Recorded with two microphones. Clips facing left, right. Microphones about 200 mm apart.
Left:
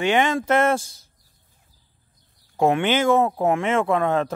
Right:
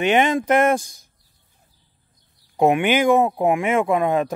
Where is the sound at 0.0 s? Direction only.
20° right (ahead or behind).